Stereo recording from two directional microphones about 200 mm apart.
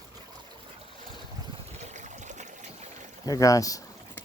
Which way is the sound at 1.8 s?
35° right (ahead or behind).